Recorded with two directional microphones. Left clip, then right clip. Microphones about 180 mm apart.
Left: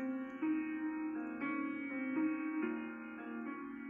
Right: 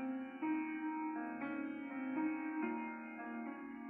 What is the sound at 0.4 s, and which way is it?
Music, 10° left (ahead or behind).